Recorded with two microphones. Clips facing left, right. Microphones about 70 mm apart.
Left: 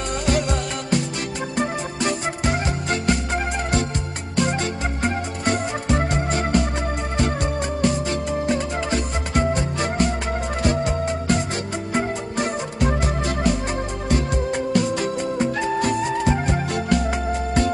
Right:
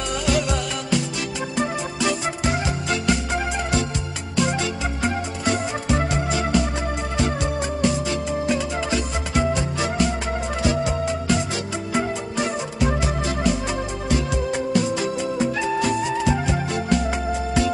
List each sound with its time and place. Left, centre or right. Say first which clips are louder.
0.1 s music: even; left